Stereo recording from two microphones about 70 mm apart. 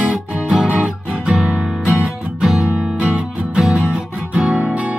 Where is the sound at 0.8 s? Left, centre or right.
Centre.